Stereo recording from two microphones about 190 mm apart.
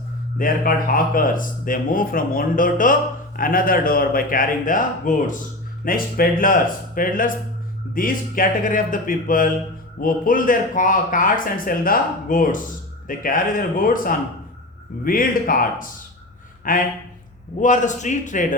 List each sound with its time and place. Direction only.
0.3 s a man's voice: 50° left (ahead or behind)